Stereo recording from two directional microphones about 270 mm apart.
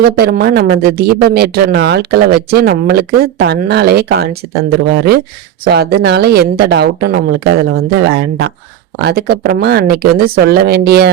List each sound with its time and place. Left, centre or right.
0.0 s speech: right
5.6 s speech: right